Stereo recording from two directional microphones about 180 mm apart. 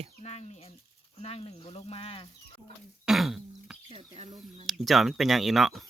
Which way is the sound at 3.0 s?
Centre (ahead or behind).